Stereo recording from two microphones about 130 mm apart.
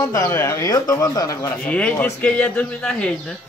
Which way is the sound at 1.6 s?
10° left (ahead or behind).